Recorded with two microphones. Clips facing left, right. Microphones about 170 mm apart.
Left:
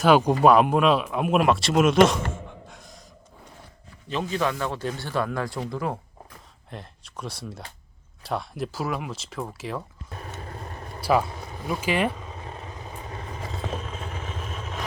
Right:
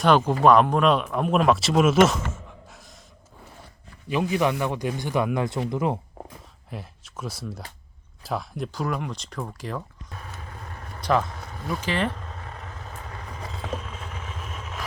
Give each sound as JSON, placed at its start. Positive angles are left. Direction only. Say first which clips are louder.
{"t": 0.2, "sound": "speech", "louder": "even", "side_deg": 15}
{"t": 2.6, "sound": "gasp", "louder": "left 2 dB", "side_deg": 0}
{"t": 4.1, "sound": "speech", "louder": "right 3 dB", "side_deg": -15}
{"t": 6.7, "sound": "speech", "louder": "right 2 dB", "side_deg": -5}
{"t": 10.4, "sound": "vehicle", "louder": "left 3 dB", "side_deg": 35}
{"t": 11.0, "sound": "vehicle", "louder": "left 1 dB", "side_deg": 10}